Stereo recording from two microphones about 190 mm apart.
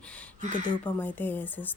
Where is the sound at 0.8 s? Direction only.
10° left (ahead or behind).